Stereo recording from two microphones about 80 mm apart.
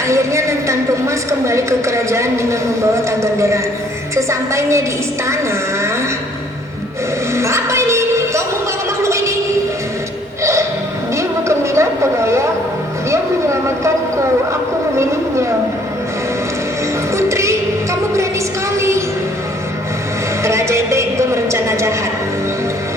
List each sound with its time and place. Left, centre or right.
0.1 s a woman's voice: right
7.3 s music: right
11.1 s music: right
13.1 s vehicle: right
17.2 s music: right
18.8 s a sound: right
20.4 s a sound: right